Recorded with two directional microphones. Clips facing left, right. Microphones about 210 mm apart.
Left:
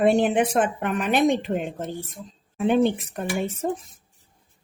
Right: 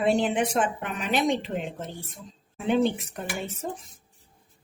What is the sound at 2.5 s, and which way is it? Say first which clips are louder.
Speech: left 4 dB; 55° left (ahead or behind).